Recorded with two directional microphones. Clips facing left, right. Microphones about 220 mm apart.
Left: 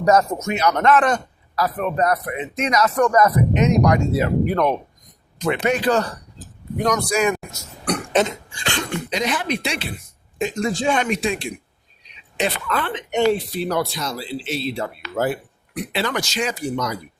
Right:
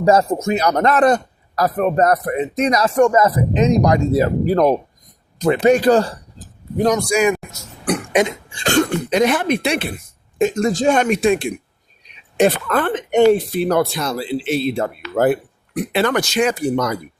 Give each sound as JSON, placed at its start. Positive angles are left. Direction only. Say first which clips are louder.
{"t": 0.0, "sound": "a man's voice", "louder": "right 3 dB", "side_deg": -30}
{"t": 7.1, "sound": "a man's voice", "louder": "right 4 dB", "side_deg": -10}
{"t": 7.9, "sound": "burping", "louder": "right 3 dB", "side_deg": -10}
{"t": 8.6, "sound": "speech", "louder": "right 9 dB", "side_deg": -45}